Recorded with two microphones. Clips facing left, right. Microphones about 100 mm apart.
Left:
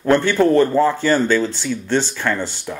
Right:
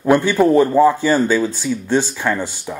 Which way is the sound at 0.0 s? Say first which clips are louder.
Right 1 dB; 10° right (ahead or behind).